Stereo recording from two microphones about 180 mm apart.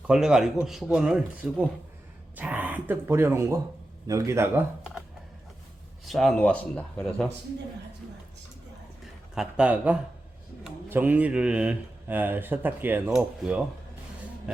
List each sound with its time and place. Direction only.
0.1 s speech: 5° right (ahead or behind)
6.1 s speech: centre (ahead or behind)
9.3 s speech: 5° right (ahead or behind)